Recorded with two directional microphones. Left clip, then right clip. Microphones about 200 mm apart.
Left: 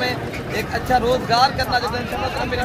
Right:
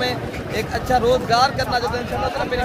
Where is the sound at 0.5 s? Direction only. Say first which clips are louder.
Even; 25° right (ahead or behind).